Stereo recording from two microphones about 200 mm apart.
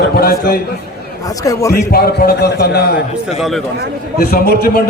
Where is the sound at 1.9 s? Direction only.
50° left (ahead or behind).